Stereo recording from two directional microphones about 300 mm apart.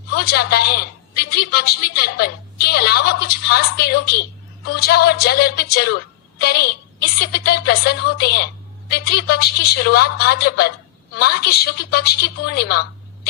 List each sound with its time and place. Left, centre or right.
0.1 s a woman's voice: left